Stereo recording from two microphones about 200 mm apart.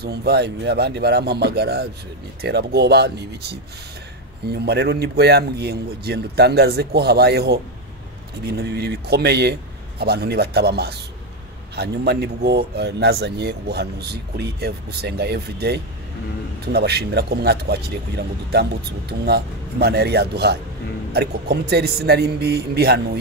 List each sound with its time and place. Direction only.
0.0 s a man's voice: 55° right (ahead or behind)